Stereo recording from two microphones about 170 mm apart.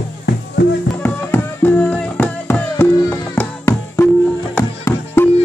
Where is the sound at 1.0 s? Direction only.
10° left (ahead or behind).